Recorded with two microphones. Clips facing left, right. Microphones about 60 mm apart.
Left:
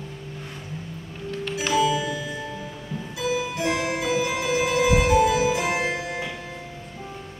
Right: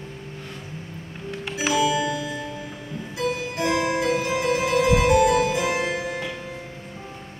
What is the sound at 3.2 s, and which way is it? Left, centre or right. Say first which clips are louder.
Music: even; right.